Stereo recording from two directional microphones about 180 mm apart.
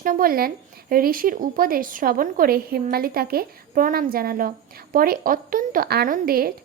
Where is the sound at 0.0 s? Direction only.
50° right (ahead or behind).